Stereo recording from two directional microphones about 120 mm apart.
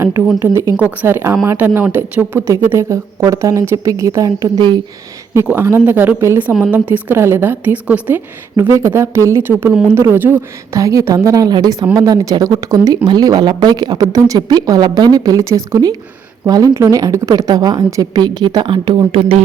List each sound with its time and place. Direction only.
0.3 s a woman's voice: 20° right (ahead or behind)
8.5 s a woman's voice: 25° right (ahead or behind); by 19.0 s 40° right (ahead or behind)